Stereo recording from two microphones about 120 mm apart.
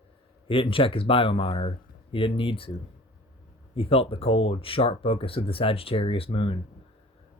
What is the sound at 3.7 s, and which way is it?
Speech, 55° left (ahead or behind).